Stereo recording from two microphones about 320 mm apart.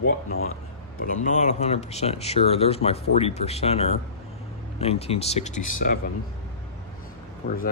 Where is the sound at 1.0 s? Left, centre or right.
Left.